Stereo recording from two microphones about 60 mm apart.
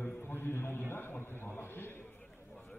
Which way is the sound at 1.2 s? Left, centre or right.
Left.